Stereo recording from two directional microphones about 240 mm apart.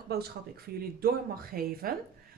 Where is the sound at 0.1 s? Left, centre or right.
Right.